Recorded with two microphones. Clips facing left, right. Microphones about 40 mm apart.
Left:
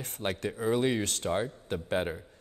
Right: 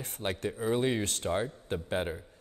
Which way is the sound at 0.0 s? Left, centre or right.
Left.